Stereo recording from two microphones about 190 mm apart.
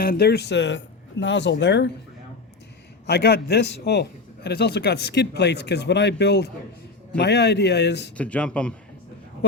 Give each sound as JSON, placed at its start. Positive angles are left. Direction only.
{"t": 0.0, "sound": "speech", "side_deg": 55}
{"t": 3.1, "sound": "speech", "side_deg": 60}
{"t": 8.1, "sound": "speech", "side_deg": 5}